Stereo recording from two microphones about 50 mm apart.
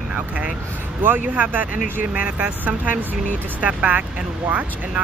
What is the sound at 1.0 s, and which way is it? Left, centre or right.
Speech, right.